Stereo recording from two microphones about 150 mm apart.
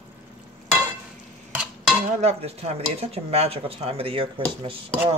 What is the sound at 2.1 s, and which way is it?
Dishes, 45° right (ahead or behind).